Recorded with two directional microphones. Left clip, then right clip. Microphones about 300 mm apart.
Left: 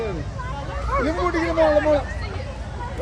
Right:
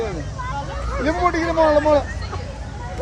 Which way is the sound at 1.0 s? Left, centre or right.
Centre.